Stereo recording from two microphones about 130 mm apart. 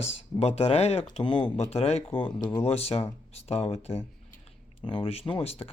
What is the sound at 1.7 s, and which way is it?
Speech, 55° left (ahead or behind).